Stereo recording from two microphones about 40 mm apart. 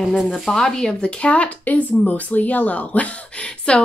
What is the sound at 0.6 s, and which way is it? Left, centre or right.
Speech, centre.